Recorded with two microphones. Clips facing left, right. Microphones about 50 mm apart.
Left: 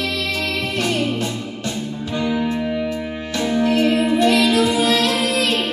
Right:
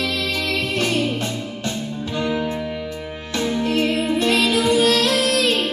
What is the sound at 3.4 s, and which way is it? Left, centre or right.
Music, left.